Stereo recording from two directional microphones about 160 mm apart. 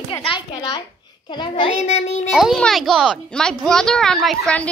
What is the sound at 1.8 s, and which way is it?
Speech, 45° left (ahead or behind).